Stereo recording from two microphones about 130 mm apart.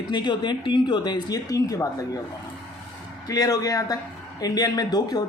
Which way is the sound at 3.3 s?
30° left (ahead or behind).